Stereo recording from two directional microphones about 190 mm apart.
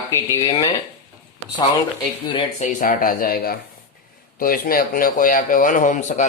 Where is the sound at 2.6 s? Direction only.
45° left (ahead or behind).